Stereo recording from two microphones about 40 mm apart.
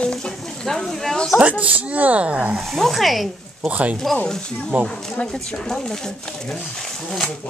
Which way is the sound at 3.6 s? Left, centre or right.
Right.